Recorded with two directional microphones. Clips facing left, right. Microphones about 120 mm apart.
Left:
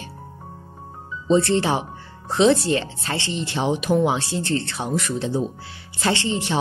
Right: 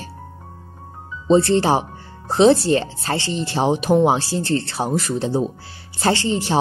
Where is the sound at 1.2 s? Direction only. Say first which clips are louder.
Right 3 dB; 35° right (ahead or behind).